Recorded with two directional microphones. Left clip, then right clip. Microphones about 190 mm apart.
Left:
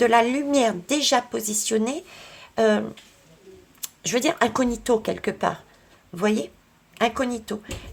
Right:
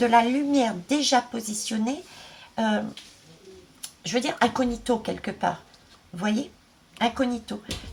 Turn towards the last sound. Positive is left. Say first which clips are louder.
# left 1 dB
turn(degrees=40)  # may be behind; listen again after turning